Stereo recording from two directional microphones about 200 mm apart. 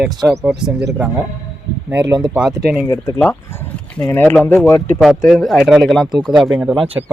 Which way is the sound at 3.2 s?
10° left (ahead or behind).